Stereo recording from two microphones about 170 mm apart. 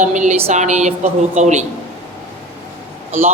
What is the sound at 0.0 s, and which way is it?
A woman's voice, 45° right (ahead or behind).